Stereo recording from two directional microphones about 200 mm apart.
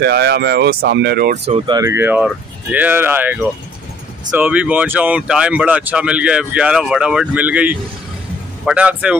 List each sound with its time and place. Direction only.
0.0 s speech: 55° right (ahead or behind)
1.3 s speech: 30° right (ahead or behind)
1.8 s speech: 10° right (ahead or behind)